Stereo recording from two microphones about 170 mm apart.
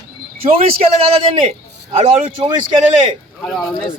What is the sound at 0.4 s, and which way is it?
Speech, 35° right (ahead or behind).